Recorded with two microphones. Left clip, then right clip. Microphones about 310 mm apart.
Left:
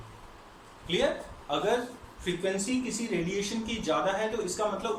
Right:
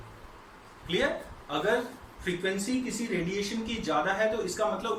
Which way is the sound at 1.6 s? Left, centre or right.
Centre.